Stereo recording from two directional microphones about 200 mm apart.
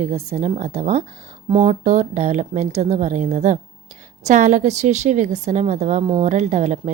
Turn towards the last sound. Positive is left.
turn(degrees=-35)  # may be behind; listen again after turning